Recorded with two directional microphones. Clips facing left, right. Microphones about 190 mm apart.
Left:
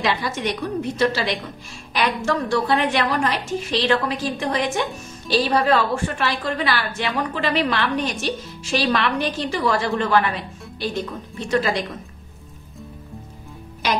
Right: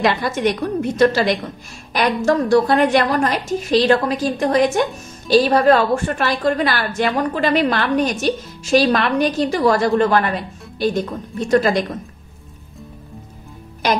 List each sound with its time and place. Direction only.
0.0 s a woman's voice: 50° right (ahead or behind)